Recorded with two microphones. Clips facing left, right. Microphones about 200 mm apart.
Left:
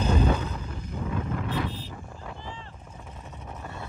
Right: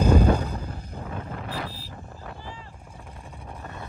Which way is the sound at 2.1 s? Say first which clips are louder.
Right 2 dB; 5° right (ahead or behind).